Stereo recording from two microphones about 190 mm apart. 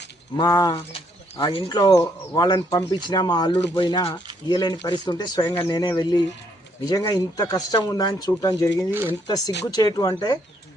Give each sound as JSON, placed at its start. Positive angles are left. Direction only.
{"t": 0.3, "sound": "speech", "side_deg": 20}
{"t": 8.9, "sound": "speech", "side_deg": -10}
{"t": 9.6, "sound": "speech", "side_deg": 20}